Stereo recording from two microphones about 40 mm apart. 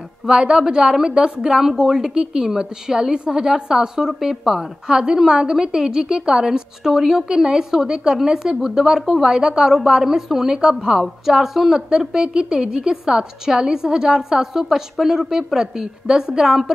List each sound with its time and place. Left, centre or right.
0.3 s a woman's voice: centre